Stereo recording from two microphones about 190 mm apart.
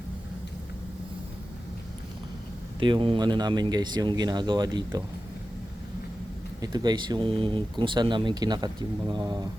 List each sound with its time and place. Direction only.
2.8 s speech: 25° right (ahead or behind)
6.6 s speech: 20° right (ahead or behind)